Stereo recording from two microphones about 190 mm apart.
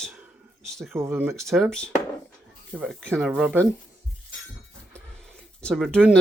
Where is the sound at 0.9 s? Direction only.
10° right (ahead or behind).